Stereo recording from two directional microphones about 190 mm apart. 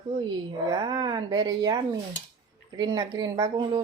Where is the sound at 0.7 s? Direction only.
20° right (ahead or behind).